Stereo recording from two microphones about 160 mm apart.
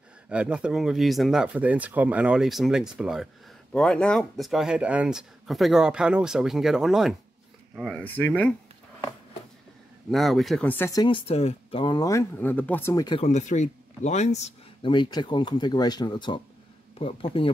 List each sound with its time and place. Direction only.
0.3 s speech: 5° right (ahead or behind)
3.7 s speech: 5° left (ahead or behind)
10.1 s speech: centre (ahead or behind); by 11.1 s 15° left (ahead or behind)
11.1 s speech: 35° left (ahead or behind); by 12.9 s 10° left (ahead or behind)
12.9 s speech: 25° left (ahead or behind)
13.2 s speech: 50° left (ahead or behind)
14.8 s speech: 30° left (ahead or behind)